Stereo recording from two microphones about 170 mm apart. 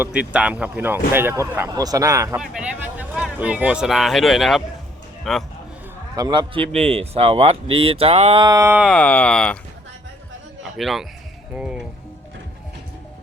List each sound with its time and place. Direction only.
0.0 s speech: 5° right (ahead or behind)
2.4 s a man's voice: 5° right (ahead or behind)
6.1 s a man's voice: 25° right (ahead or behind)
8.8 s speech: 5° left (ahead or behind)
10.6 s a sound: centre (ahead or behind)
11.5 s speech: 5° right (ahead or behind)